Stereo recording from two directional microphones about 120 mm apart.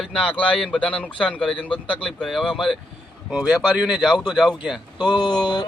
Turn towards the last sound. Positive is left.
turn(degrees=40)  # may be behind; listen again after turning